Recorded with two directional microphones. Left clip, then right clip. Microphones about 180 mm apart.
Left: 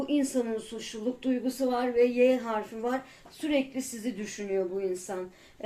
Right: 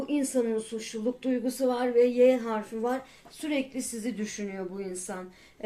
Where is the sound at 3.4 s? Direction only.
45° right (ahead or behind).